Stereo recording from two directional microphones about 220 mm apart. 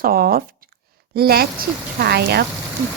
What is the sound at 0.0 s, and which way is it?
A woman's voice, 40° right (ahead or behind).